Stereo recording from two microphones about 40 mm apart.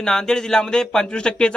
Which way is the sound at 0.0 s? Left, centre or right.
Centre.